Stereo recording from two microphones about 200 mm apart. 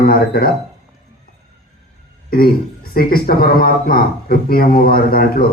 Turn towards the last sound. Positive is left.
turn(degrees=45)  # may be behind; listen again after turning